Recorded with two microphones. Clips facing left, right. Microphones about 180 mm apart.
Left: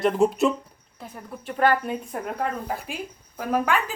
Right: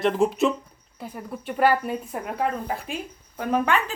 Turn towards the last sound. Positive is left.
turn(degrees=5)  # may be behind; listen again after turning